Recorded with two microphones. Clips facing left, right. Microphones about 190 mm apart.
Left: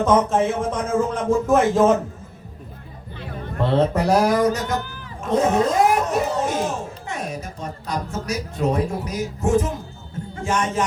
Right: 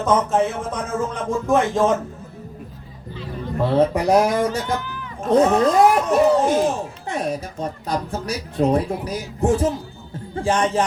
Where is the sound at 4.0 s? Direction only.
15° right (ahead or behind).